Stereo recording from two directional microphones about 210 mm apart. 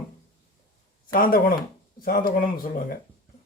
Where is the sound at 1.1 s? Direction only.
40° left (ahead or behind).